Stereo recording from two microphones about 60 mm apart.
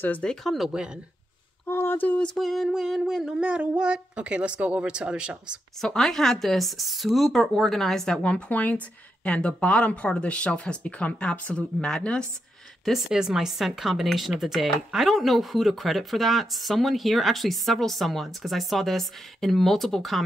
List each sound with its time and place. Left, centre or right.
0.2 s speech: centre
0.7 s humming: centre
1.7 s a sound: left
2.3 s humming: centre
5.8 s speech: centre
8.2 s speech: centre
13.1 s speech: centre